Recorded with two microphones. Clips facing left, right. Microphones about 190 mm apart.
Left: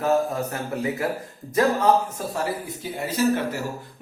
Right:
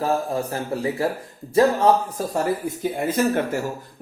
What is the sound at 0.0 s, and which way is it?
Speech, 30° right (ahead or behind).